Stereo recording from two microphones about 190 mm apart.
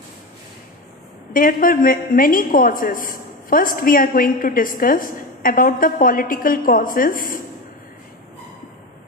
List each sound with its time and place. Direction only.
1.3 s a woman's voice: 45° left (ahead or behind)